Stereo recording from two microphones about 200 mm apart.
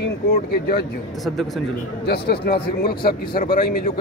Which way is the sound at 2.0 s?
50° left (ahead or behind).